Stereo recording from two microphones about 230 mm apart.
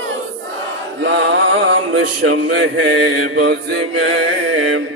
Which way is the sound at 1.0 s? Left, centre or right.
Right.